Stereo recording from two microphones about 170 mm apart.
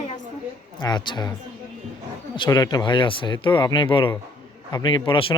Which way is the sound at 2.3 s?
25° left (ahead or behind).